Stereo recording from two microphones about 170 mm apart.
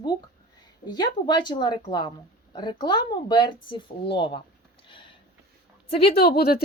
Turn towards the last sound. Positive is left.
turn(degrees=65)  # may be behind; listen again after turning